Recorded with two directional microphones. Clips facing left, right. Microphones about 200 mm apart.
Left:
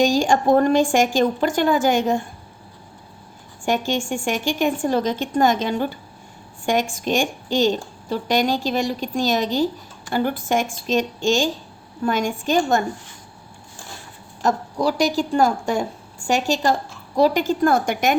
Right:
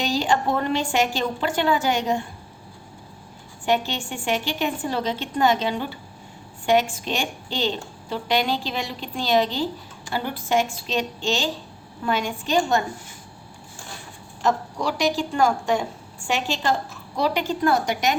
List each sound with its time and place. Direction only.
0.0 s a woman's voice: 45° left (ahead or behind)
3.7 s a woman's voice: 45° left (ahead or behind)
14.4 s a woman's voice: 40° left (ahead or behind)